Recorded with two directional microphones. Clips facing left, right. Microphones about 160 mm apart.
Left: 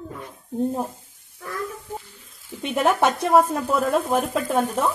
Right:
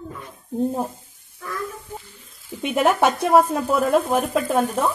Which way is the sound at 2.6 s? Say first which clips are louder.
Right 2 dB; 5° right (ahead or behind).